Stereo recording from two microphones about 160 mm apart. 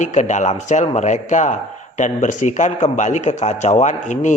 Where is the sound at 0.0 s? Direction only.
45° left (ahead or behind).